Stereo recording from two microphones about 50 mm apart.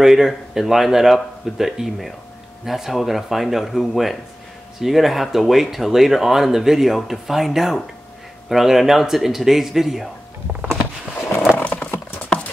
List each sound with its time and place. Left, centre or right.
0.0 s speech: centre
11.5 s horse: left